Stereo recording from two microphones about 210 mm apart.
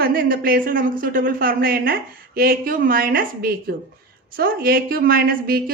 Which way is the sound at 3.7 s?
60° right (ahead or behind).